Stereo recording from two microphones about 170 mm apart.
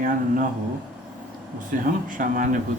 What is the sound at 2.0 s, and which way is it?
Speech, 55° right (ahead or behind).